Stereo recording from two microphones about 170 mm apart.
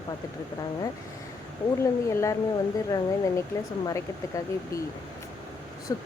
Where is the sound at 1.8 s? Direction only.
15° left (ahead or behind).